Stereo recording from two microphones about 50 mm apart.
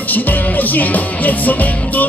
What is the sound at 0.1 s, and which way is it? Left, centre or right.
Music, left.